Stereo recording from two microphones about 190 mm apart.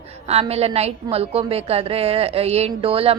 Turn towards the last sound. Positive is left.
turn(degrees=-30)  # may be behind; listen again after turning